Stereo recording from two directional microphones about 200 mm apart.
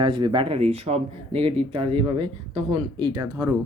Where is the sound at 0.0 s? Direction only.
25° right (ahead or behind).